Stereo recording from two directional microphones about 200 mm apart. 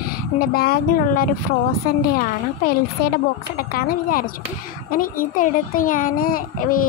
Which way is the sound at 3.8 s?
45° left (ahead or behind).